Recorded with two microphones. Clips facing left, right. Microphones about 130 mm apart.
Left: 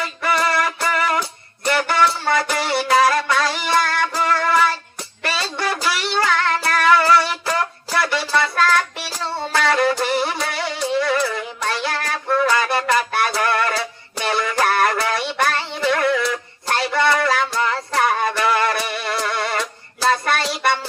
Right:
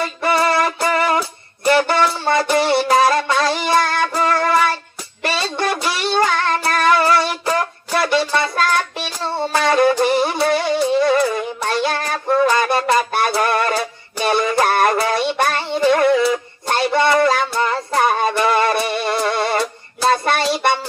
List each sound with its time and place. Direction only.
0.0 s music: 25° right (ahead or behind)
7.9 s child singing: 20° right (ahead or behind)
11.3 s music: 25° right (ahead or behind)